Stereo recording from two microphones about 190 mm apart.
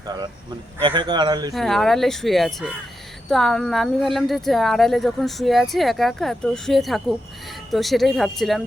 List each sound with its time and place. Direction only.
0.8 s speech: 25° right (ahead or behind)
1.5 s speech: centre (ahead or behind)